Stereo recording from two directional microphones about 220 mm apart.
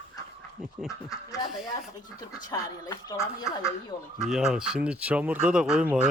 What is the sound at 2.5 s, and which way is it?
Speech, 15° left (ahead or behind).